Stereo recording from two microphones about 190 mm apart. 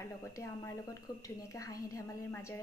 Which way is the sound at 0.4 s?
15° left (ahead or behind).